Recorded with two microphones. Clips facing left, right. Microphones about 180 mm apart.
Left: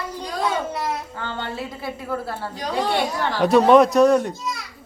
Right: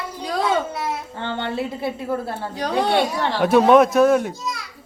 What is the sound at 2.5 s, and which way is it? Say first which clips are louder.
Speech: right 3 dB; 70° right (ahead or behind).